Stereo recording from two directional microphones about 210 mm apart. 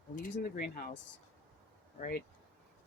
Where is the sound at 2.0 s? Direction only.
45° left (ahead or behind).